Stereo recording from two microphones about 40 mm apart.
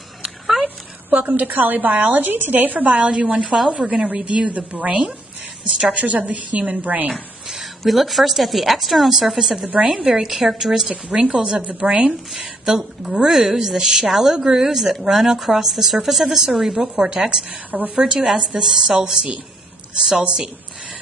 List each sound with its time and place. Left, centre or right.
0.2 s a sound: centre
1.2 s a woman's voice: right
3.2 s a woman's voice: right
3.5 s a woman's voice: centre
3.8 s a woman's voice: right
7.4 s a woman's voice: centre
10.9 s a woman's voice: right
11.8 s a woman's voice: right
12.3 s a woman's voice: centre
17.6 s a woman's voice: right
17.9 s a woman's voice: centre